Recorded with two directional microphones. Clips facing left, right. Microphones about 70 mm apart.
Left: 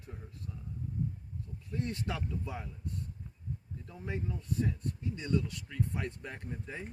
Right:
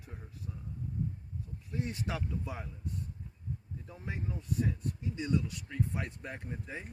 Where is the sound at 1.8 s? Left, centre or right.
Centre.